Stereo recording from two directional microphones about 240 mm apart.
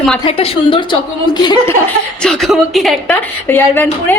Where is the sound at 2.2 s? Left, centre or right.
Centre.